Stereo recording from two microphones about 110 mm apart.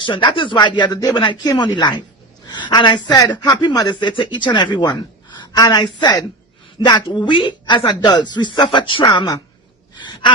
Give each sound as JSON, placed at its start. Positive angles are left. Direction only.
{"t": 0.0, "sound": "speech", "side_deg": 45}
{"t": 1.2, "sound": "speech", "side_deg": 45}
{"t": 10.1, "sound": "gasp", "side_deg": 45}